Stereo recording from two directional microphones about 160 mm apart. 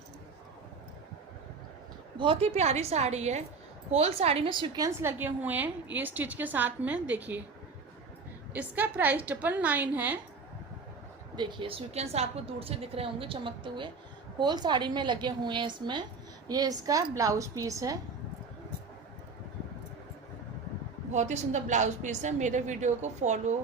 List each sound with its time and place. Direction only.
2.1 s a woman's voice: 35° right (ahead or behind)
4.9 s a woman's voice: 15° right (ahead or behind)
8.5 s a woman's voice: 10° right (ahead or behind)
11.3 s a woman's voice: 30° right (ahead or behind)
21.1 s a woman's voice: 45° right (ahead or behind)